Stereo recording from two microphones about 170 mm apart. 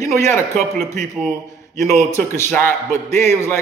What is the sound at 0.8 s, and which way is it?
Speech, 45° right (ahead or behind).